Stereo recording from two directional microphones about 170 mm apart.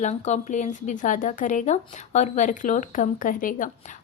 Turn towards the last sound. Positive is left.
turn(degrees=50)  # may be behind; listen again after turning